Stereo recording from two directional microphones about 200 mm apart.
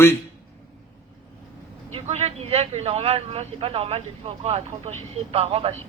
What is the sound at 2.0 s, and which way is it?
Speech, 35° right (ahead or behind).